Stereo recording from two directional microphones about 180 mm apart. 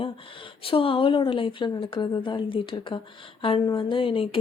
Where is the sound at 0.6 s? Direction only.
30° left (ahead or behind).